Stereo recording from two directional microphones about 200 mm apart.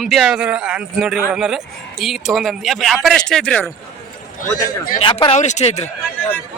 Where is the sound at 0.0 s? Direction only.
Centre (ahead or behind).